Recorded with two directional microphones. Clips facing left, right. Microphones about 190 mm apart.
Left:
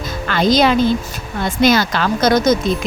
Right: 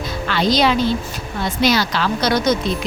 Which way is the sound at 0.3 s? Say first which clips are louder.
Left 3 dB; 45° left (ahead or behind).